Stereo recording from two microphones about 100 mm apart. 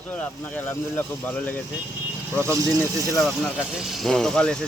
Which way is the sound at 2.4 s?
30° right (ahead or behind).